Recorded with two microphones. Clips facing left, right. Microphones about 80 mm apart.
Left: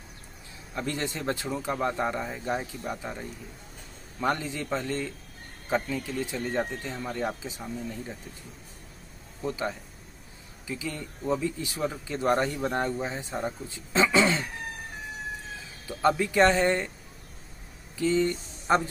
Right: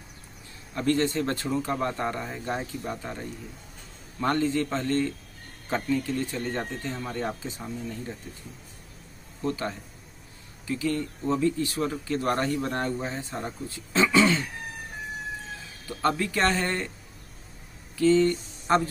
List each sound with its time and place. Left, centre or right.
0.7 s speech: centre
4.2 s speech: centre
9.4 s speech: centre
16.0 s speech: centre
17.9 s speech: centre